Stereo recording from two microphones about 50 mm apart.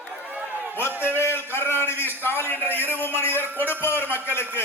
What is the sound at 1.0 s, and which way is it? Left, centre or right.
A man's voice, left.